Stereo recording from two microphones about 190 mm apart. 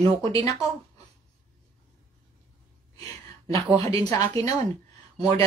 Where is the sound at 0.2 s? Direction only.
15° left (ahead or behind).